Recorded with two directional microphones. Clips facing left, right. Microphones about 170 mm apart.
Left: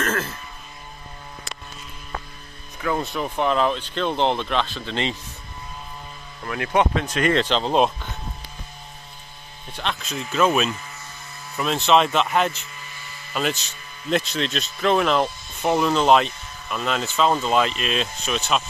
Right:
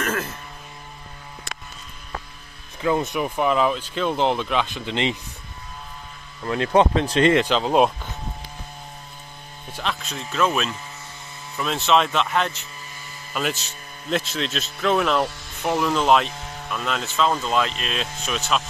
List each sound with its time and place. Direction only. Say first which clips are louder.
0.0 s music: left 1 dB; 10° right (ahead or behind)
2.8 s speech: right 3 dB; 20° right (ahead or behind)
4.6 s speech: right 2 dB; 15° right (ahead or behind)
6.4 s speech: right 3 dB; 25° right (ahead or behind)
7.3 s speech: right 1 dB; 5° right (ahead or behind)
9.8 s speech: left 1 dB; centre (ahead or behind)